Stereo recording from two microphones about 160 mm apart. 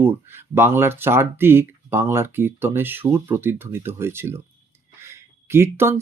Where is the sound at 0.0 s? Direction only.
15° right (ahead or behind).